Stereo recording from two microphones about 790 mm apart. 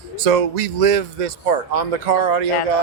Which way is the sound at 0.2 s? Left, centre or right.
Right.